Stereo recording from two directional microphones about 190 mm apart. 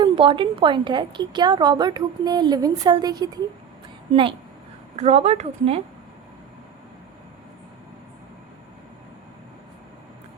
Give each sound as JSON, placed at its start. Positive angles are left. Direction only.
{"t": 0.0, "sound": "a woman's voice", "side_deg": -25}